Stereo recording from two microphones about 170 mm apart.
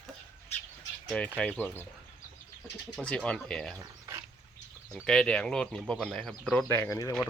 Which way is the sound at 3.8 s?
15° right (ahead or behind).